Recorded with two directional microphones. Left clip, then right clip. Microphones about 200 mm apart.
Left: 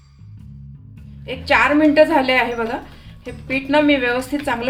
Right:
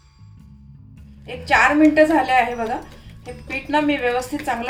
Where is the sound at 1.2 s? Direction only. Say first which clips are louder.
Left 2 dB; 40° left (ahead or behind).